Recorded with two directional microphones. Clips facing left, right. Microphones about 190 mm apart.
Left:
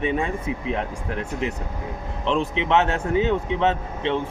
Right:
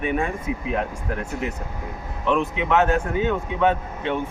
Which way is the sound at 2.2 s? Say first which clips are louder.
Right 1 dB; 25° left (ahead or behind).